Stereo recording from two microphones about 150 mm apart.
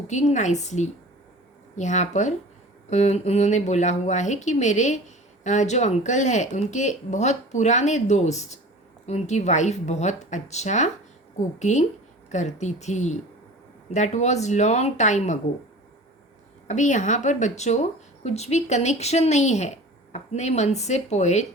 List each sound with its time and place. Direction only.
0.1 s speech: 50° left (ahead or behind)
16.6 s speech: 55° left (ahead or behind)